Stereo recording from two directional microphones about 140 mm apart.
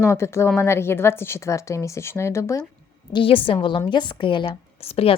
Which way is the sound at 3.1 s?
40° left (ahead or behind).